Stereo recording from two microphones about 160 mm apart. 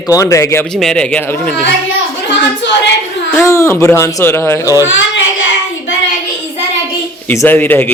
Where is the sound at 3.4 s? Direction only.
15° left (ahead or behind).